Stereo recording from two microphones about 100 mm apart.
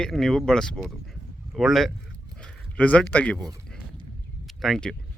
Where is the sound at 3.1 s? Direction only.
15° left (ahead or behind).